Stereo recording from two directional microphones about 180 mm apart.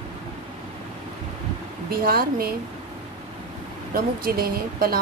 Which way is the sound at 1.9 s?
55° right (ahead or behind).